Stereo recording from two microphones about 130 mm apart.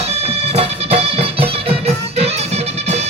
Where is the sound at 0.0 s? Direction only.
55° right (ahead or behind).